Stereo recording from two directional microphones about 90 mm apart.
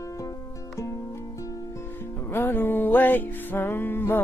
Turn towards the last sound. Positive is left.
turn(degrees=25)  # may be behind; listen again after turning